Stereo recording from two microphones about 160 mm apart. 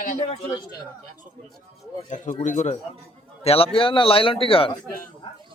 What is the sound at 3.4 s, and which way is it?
Speech, 40° left (ahead or behind).